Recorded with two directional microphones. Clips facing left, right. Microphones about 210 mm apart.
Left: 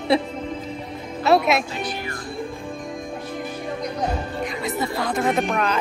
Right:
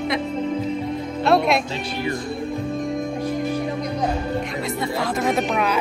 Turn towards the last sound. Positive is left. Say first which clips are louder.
# right 1 dB
turn(degrees=-5)  # may be behind; listen again after turning